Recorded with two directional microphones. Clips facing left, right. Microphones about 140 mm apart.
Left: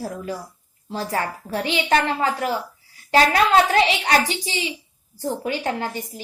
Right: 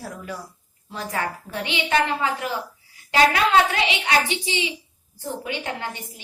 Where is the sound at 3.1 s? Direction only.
35° left (ahead or behind).